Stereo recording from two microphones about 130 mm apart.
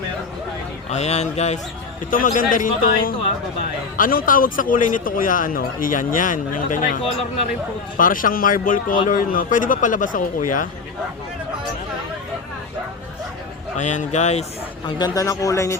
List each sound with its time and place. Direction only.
0.9 s speech: 55° left (ahead or behind)
2.0 s speech: 90° left
13.7 s speech: 70° left (ahead or behind)
14.8 s speech: 30° left (ahead or behind)